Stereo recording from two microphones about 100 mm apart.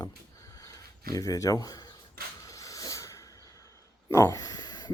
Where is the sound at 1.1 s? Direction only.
35° left (ahead or behind).